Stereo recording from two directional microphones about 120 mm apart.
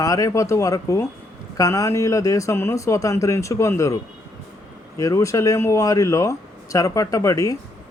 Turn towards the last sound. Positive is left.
turn(degrees=30)  # may be behind; listen again after turning